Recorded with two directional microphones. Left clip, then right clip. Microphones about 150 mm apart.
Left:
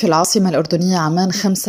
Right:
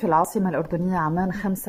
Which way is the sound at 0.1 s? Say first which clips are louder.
Left 5 dB; 25° left (ahead or behind).